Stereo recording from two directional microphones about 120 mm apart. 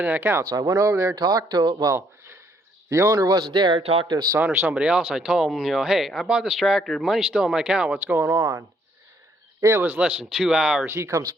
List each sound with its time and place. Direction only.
0.0 s speech: 20° right (ahead or behind)
2.0 s a sound: 20° right (ahead or behind)
3.1 s speech: 30° right (ahead or behind); by 4.1 s 50° right (ahead or behind)
4.1 s speech: 35° right (ahead or behind)
4.4 s speech: 15° right (ahead or behind)
8.1 s speech: 20° right (ahead or behind)
9.8 s speech: 15° right (ahead or behind)
10.9 s speech: 25° right (ahead or behind)